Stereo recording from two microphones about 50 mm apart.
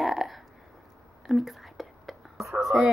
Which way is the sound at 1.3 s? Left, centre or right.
Centre.